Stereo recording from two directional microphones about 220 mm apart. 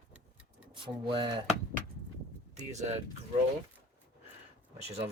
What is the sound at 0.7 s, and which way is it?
Speech, 20° right (ahead or behind).